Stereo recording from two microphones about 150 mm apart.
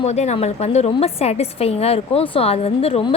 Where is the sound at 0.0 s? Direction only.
45° left (ahead or behind).